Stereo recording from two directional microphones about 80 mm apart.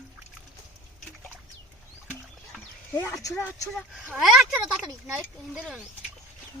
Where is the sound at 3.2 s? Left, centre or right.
Left.